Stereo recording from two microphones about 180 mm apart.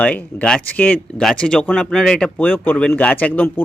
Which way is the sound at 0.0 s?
10° left (ahead or behind).